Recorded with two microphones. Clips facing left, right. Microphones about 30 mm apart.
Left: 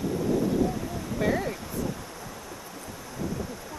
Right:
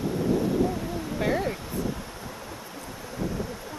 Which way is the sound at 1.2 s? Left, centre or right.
Centre.